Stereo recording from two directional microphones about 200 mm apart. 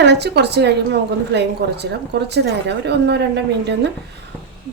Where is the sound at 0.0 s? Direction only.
60° right (ahead or behind).